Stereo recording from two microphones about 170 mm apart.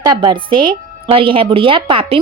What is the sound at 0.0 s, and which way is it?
A woman's voice, 25° right (ahead or behind).